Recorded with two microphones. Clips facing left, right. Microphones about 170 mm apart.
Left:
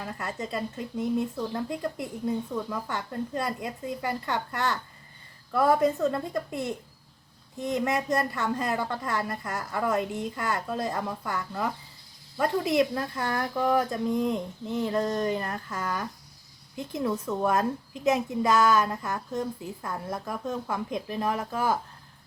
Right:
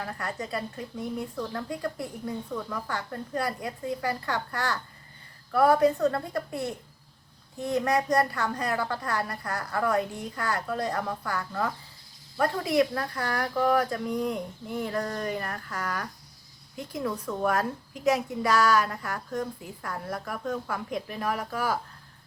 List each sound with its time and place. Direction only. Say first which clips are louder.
0.2 s a child's voice: left 3 dB; 20° left (ahead or behind)